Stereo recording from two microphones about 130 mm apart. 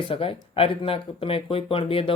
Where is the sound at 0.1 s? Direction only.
45° left (ahead or behind).